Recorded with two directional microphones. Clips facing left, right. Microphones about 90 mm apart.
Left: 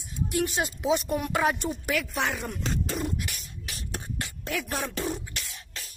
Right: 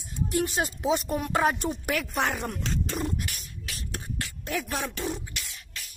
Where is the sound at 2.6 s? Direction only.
Centre (ahead or behind).